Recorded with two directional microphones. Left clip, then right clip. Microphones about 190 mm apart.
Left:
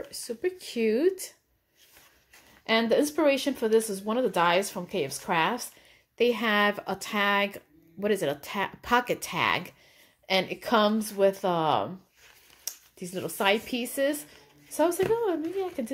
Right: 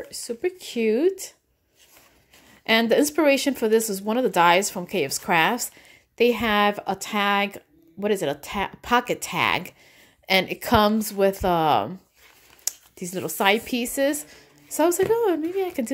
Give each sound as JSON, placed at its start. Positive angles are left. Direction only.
{"t": 0.1, "sound": "speech", "side_deg": -25}
{"t": 2.6, "sound": "speech", "side_deg": -35}